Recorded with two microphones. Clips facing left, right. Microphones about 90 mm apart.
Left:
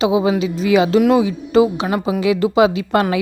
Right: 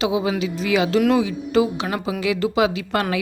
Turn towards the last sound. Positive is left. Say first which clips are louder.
# left 6 dB
turn(degrees=25)  # may be behind; listen again after turning